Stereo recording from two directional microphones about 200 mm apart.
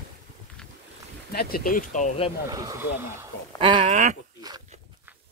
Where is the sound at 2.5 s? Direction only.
15° right (ahead or behind).